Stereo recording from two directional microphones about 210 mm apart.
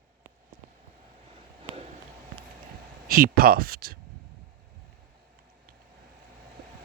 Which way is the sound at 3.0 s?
45° right (ahead or behind).